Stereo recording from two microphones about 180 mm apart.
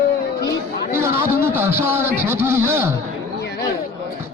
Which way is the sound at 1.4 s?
15° right (ahead or behind).